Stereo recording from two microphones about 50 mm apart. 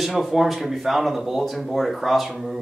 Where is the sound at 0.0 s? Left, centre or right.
Centre.